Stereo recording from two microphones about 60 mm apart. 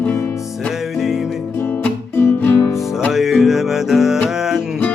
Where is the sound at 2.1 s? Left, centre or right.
Left.